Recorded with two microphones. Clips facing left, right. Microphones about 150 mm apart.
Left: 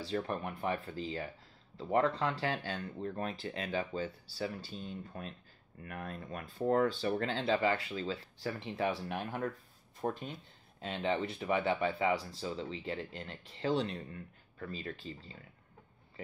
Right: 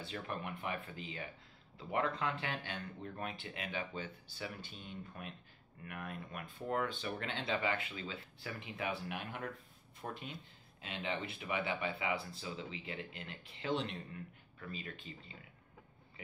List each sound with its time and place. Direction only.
0.0 s speech: 35° left (ahead or behind)